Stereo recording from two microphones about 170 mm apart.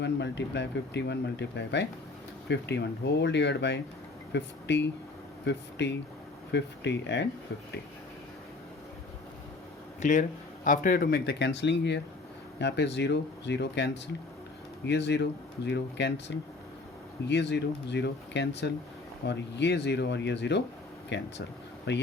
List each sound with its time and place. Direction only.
0.0 s speech: 90° left
10.0 s speech: 50° left (ahead or behind); by 16.2 s 90° left
17.2 s speech: 90° left